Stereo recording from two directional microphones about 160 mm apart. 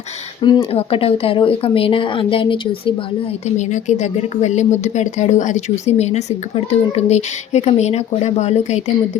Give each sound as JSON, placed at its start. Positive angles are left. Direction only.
{"t": 0.4, "sound": "speech", "side_deg": 25}
{"t": 3.4, "sound": "speech", "side_deg": 45}